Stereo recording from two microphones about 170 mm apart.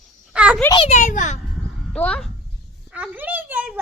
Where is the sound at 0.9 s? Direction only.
50° left (ahead or behind).